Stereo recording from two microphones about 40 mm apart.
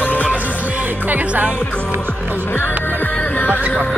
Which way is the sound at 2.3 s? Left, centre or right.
Left.